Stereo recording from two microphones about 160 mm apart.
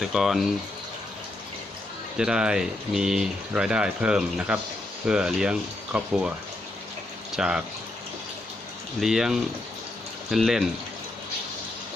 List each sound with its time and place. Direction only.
0.0 s speech: centre (ahead or behind)
2.1 s speech: 5° right (ahead or behind)
7.3 s speech: 5° right (ahead or behind)
9.0 s speech: 5° right (ahead or behind)